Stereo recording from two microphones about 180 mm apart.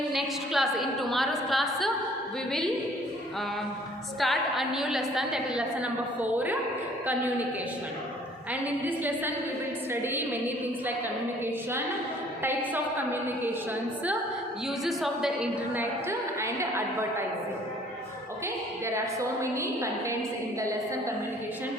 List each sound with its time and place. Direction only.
0.1 s a woman's voice: centre (ahead or behind)
4.2 s a woman's voice: centre (ahead or behind)
8.8 s a woman's voice: 10° right (ahead or behind)
12.4 s a woman's voice: 10° right (ahead or behind)
14.8 s a woman's voice: centre (ahead or behind)
18.9 s a woman's voice: 15° right (ahead or behind)